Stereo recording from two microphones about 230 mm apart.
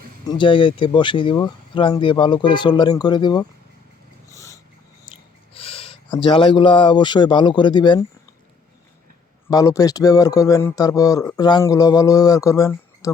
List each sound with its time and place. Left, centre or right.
0.3 s speech: left
4.3 s dog: centre
5.5 s speech: left
9.5 s speech: centre